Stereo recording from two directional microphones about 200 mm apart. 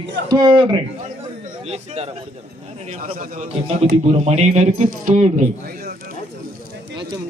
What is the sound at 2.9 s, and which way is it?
A man's voice, 45° right (ahead or behind).